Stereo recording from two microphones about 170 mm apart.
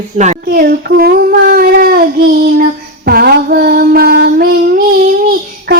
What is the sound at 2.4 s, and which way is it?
Female singing, 60° right (ahead or behind).